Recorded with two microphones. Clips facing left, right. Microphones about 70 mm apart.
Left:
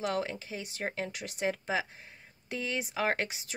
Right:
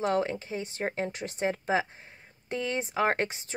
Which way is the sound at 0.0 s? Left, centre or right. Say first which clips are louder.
Right 5 dB; right.